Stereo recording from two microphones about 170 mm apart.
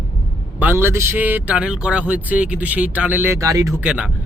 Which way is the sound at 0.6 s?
15° right (ahead or behind).